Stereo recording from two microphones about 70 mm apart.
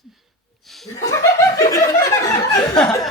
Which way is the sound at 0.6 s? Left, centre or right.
Centre.